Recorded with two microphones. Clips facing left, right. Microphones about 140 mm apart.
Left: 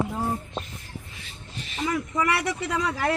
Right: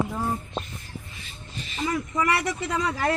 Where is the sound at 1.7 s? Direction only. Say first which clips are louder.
Even; 5° left (ahead or behind).